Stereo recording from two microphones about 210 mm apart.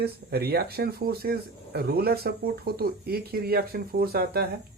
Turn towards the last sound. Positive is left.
turn(degrees=-45)  # may be behind; listen again after turning